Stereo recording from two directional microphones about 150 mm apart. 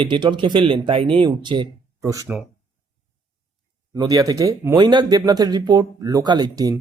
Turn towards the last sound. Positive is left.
turn(degrees=-25)  # may be behind; listen again after turning